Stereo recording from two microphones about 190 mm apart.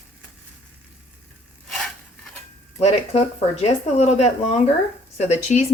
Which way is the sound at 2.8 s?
35° left (ahead or behind).